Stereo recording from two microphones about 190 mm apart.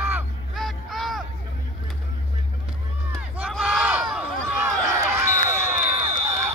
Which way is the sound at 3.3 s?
5° right (ahead or behind).